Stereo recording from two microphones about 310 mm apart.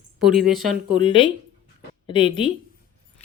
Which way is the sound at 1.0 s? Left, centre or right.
Centre.